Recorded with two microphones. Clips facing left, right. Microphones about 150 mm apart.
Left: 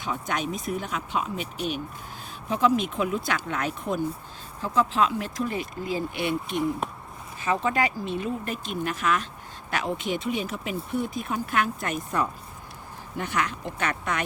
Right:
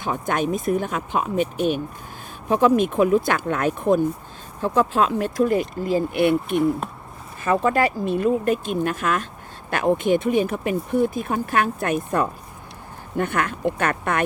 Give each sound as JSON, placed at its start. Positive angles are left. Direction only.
{"t": 0.0, "sound": "speech", "side_deg": -50}